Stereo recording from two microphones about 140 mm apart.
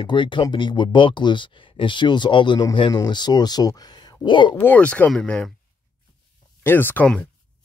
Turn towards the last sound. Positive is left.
turn(degrees=10)  # may be behind; listen again after turning